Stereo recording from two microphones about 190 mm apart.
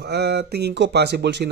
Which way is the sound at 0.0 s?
60° right (ahead or behind).